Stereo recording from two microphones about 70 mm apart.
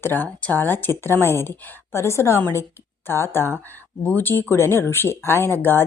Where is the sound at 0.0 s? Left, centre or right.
Left.